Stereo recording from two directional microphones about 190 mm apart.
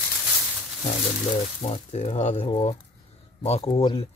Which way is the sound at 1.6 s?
35° left (ahead or behind).